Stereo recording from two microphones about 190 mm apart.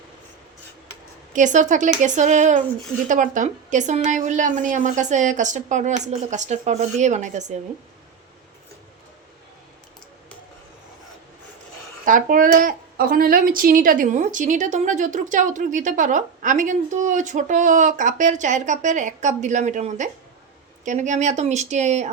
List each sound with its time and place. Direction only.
1.3 s speech: 40° right (ahead or behind)
12.0 s speech: 45° right (ahead or behind)